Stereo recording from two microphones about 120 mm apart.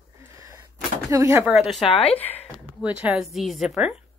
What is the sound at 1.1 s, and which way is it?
Speech, 25° right (ahead or behind).